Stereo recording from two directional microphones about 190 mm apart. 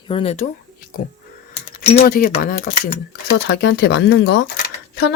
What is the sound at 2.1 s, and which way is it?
Speech, 50° left (ahead or behind).